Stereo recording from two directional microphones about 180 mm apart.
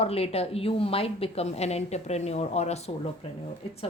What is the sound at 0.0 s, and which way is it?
A woman's voice, 35° left (ahead or behind).